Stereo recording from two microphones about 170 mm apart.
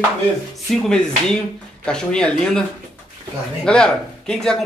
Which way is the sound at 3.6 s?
5° left (ahead or behind).